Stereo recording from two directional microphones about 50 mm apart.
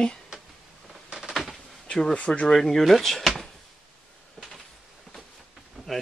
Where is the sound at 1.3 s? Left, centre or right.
Centre.